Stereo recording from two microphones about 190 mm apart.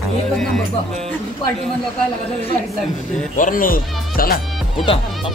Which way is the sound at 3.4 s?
45° left (ahead or behind).